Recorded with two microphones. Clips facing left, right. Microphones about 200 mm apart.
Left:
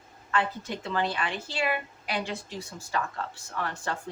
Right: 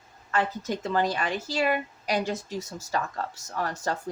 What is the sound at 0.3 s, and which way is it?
A woman's voice, 40° right (ahead or behind).